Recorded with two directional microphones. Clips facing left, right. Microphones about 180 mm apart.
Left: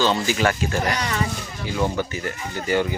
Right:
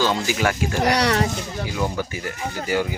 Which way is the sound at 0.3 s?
10° right (ahead or behind).